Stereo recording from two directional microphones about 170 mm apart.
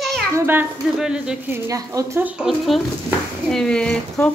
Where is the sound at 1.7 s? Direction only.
20° right (ahead or behind).